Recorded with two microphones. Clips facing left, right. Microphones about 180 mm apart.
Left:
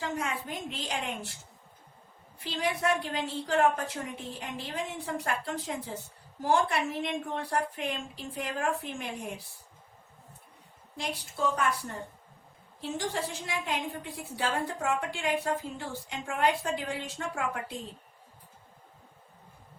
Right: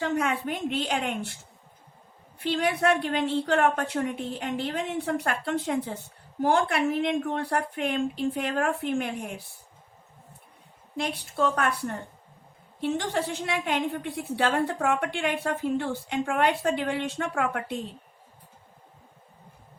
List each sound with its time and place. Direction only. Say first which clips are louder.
0.0 s a woman's voice: right 7 dB; 65° right (ahead or behind)
2.4 s a woman's voice: right 6 dB; 65° right (ahead or behind)
10.9 s a woman's voice: right 7 dB; 65° right (ahead or behind)